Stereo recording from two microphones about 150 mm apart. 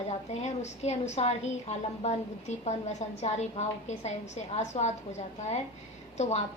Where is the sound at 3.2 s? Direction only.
45° left (ahead or behind).